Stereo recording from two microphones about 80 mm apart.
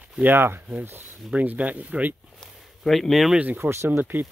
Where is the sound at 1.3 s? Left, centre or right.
Centre.